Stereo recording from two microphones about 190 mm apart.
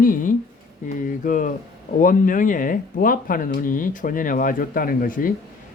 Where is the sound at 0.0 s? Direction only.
45° left (ahead or behind).